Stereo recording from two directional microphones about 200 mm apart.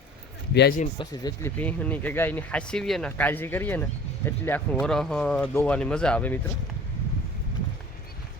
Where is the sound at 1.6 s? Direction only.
5° left (ahead or behind).